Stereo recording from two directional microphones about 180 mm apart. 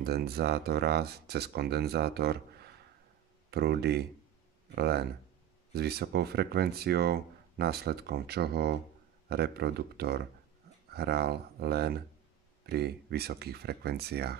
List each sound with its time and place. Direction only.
0.0 s speech: 60° right (ahead or behind)